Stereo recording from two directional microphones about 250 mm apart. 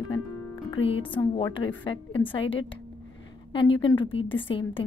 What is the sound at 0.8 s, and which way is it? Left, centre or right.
A woman's voice, left.